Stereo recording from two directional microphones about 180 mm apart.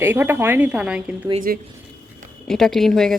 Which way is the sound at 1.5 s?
55° right (ahead or behind).